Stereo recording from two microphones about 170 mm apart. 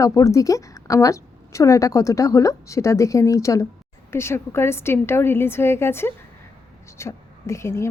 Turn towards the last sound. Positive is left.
turn(degrees=15)  # may be behind; listen again after turning